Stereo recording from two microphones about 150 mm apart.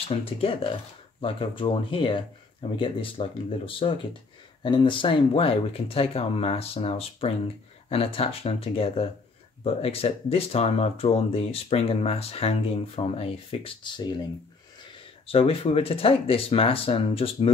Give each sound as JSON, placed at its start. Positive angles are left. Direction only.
{"t": 0.1, "sound": "speech", "side_deg": 40}
{"t": 15.2, "sound": "speech", "side_deg": 40}